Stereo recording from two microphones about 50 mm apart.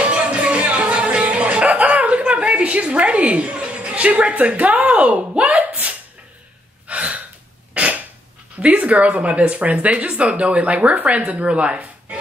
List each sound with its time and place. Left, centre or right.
0.0 s music: right
6.9 s gasp: right
7.7 s cough: right
8.5 s speech: right